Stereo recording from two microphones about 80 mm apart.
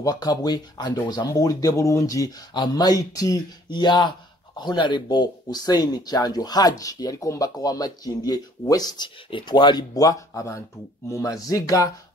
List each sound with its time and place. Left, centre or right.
0.0 s speech: left
2.5 s speech: left
3.7 s speech: left
9.9 s speech: left